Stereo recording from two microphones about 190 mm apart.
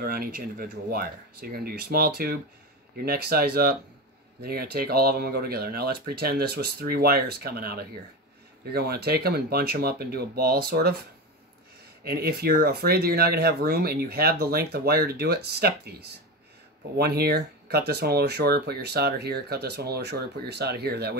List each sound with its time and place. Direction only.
0.0 s speech: 50° right (ahead or behind)
12.0 s speech: 55° right (ahead or behind)